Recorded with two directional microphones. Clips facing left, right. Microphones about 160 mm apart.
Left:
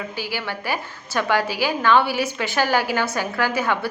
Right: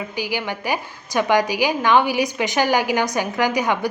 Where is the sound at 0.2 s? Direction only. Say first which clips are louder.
Right 6 dB; 15° right (ahead or behind).